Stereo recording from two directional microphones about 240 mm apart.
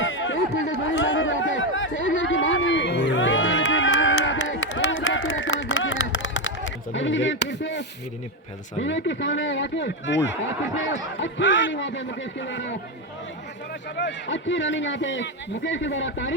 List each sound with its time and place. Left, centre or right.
0.0 s a sound: left
8.8 s speech: left
13.9 s speech: left